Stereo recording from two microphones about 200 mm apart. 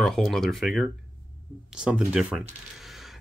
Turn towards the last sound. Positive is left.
turn(degrees=0)  # may be behind; listen again after turning